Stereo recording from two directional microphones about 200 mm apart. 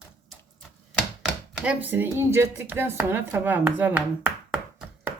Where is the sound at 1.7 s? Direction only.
10° right (ahead or behind).